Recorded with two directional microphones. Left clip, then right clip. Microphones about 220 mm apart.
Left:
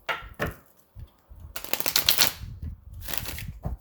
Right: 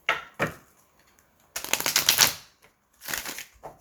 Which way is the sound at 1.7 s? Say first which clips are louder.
Right 1 dB; 25° left (ahead or behind).